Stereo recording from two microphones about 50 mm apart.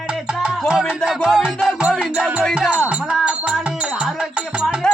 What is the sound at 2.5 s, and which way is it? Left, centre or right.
Speech, centre.